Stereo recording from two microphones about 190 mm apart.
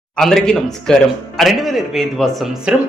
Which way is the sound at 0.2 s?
Centre (ahead or behind).